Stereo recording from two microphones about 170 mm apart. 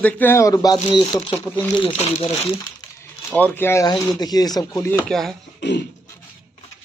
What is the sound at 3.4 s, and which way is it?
Speech, 10° left (ahead or behind).